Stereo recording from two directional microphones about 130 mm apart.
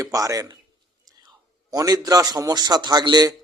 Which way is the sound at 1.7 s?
30° right (ahead or behind).